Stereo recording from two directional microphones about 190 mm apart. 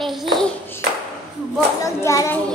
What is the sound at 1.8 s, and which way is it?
Speech, 15° left (ahead or behind).